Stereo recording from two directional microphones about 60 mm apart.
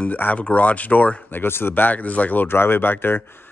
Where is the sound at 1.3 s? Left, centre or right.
Left.